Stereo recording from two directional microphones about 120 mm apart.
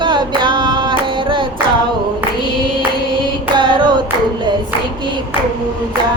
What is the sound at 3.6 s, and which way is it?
Singing, 40° right (ahead or behind).